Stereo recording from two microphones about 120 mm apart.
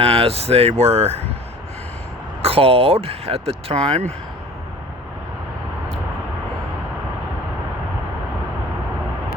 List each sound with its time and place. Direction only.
0.0 s speech: 55° right (ahead or behind)
2.4 s speech: 55° right (ahead or behind)